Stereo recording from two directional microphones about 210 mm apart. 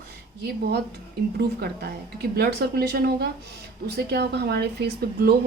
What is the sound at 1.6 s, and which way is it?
A woman's voice, 50° right (ahead or behind).